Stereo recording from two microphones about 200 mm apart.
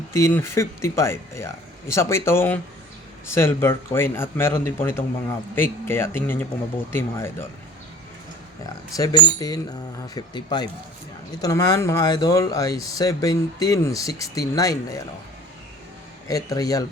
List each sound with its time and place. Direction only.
0.1 s speech: 10° left (ahead or behind)
9.0 s speech: 20° left (ahead or behind)
16.3 s speech: 15° left (ahead or behind)